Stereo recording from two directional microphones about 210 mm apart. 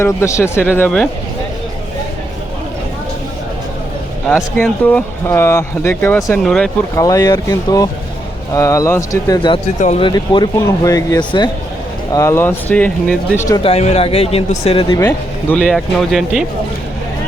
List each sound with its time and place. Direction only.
0.0 s speech: 15° left (ahead or behind)
4.3 s speech: centre (ahead or behind)
6.9 s speech: 15° left (ahead or behind)
9.7 s speech: 35° left (ahead or behind)
10.1 s speech: 20° left (ahead or behind)
13.6 s speech: 30° left (ahead or behind)
14.9 s speech: 10° left (ahead or behind)